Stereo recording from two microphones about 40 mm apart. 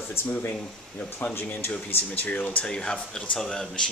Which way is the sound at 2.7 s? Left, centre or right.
Left.